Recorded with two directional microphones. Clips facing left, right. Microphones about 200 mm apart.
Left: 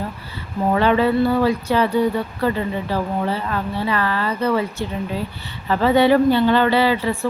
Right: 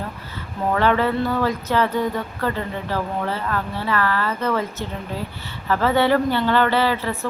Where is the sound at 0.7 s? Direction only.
15° left (ahead or behind).